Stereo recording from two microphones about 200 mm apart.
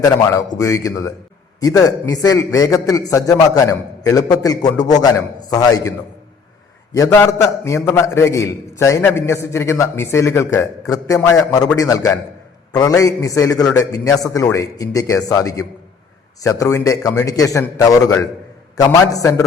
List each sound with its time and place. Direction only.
0.0 s a man's voice: 20° left (ahead or behind)
6.9 s a man's voice: 15° left (ahead or behind)